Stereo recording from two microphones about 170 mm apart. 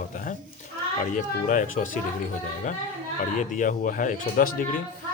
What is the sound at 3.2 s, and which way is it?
Speech, 50° left (ahead or behind).